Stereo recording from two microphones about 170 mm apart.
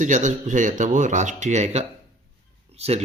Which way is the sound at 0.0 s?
50° right (ahead or behind).